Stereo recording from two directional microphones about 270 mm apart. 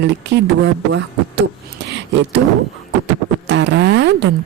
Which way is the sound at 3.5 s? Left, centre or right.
Right.